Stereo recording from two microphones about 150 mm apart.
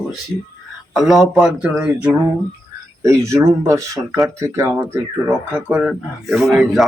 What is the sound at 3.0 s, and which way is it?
Speech, 20° right (ahead or behind).